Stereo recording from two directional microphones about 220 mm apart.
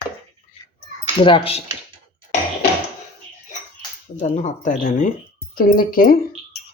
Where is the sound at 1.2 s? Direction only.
25° left (ahead or behind).